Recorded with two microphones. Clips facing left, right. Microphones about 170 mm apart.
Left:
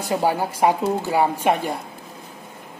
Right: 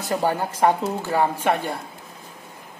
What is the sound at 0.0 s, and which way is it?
Speech, 10° left (ahead or behind).